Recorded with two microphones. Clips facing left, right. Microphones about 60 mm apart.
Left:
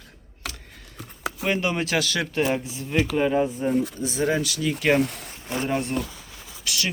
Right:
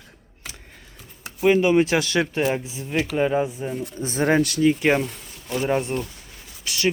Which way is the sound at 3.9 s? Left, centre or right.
Right.